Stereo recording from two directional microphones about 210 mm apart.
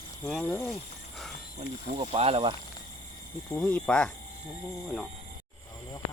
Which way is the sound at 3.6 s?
5° left (ahead or behind).